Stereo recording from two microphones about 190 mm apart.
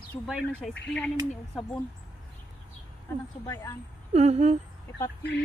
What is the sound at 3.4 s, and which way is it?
Speech, 15° left (ahead or behind).